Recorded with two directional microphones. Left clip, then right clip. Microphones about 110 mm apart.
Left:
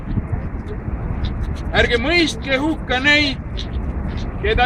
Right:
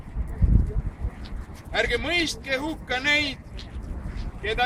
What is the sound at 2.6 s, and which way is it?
Speech, 40° right (ahead or behind).